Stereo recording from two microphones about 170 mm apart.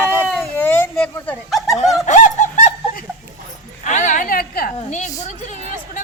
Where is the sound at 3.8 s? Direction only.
45° left (ahead or behind).